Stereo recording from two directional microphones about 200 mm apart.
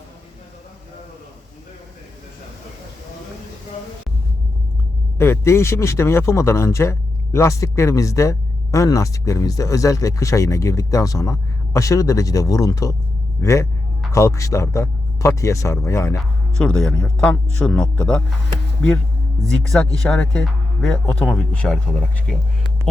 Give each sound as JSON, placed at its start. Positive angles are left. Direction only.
{"t": 5.1, "sound": "speech", "side_deg": 10}
{"t": 19.5, "sound": "speech", "side_deg": 5}